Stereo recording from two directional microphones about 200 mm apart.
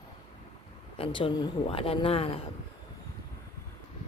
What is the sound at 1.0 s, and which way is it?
Speech, 25° left (ahead or behind).